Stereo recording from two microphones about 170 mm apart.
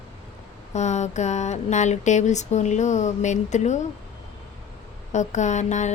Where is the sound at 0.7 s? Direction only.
40° left (ahead or behind).